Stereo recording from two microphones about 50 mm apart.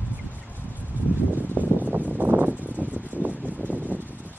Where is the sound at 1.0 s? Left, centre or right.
Right.